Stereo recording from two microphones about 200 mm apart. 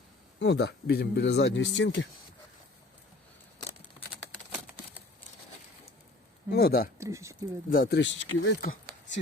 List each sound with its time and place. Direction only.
0.3 s speech: 55° left (ahead or behind)
6.5 s speech: 50° left (ahead or behind)
7.0 s speech: 15° right (ahead or behind)
7.7 s speech: 50° left (ahead or behind); by 8.5 s 75° left (ahead or behind)